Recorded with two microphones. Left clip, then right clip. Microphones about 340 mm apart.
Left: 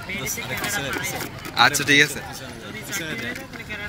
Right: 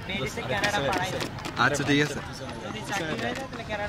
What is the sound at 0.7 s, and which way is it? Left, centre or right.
Speech, right.